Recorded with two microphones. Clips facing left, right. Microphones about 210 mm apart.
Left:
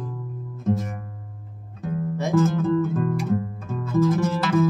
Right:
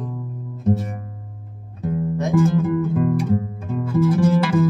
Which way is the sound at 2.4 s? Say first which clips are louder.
Right 1 dB; 15° right (ahead or behind).